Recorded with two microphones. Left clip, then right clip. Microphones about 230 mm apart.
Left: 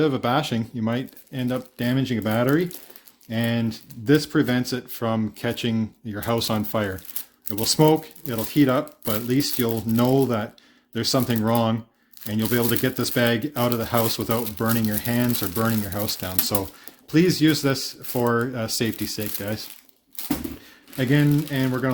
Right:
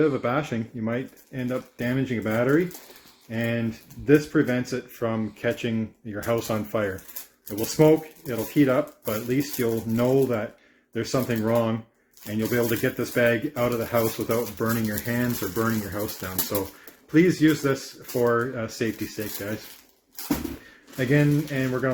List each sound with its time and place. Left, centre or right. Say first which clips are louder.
0.0 s speech: left 2 dB; left
21.0 s speech: left 1 dB; left